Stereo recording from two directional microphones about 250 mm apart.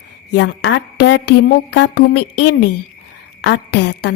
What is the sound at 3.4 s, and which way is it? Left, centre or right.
Speech, left.